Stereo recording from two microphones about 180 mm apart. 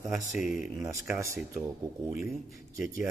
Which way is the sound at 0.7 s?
15° right (ahead or behind).